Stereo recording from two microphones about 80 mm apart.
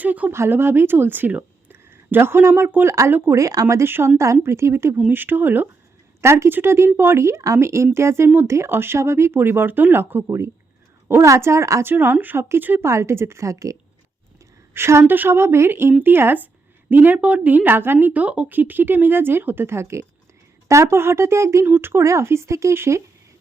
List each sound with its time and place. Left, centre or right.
0.0 s speech: right
3.3 s a woman's voice: right
11.9 s a woman's voice: right